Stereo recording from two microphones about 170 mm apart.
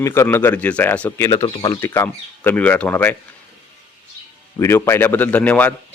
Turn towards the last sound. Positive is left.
turn(degrees=10)  # may be behind; listen again after turning